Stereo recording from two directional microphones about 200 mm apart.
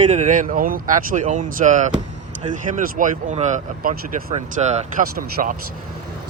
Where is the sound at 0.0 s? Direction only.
35° right (ahead or behind).